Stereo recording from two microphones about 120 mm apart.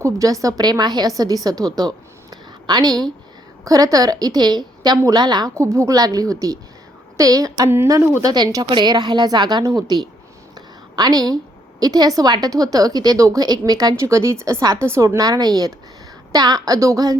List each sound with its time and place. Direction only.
0.0 s a woman's voice: 30° right (ahead or behind)
2.3 s a sound: 35° right (ahead or behind)
3.6 s a woman's voice: 30° right (ahead or behind)
8.2 s a woman's voice: 35° right (ahead or behind)